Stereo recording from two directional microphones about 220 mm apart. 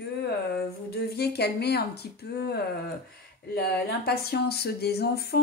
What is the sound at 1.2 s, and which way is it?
Speech, 45° left (ahead or behind).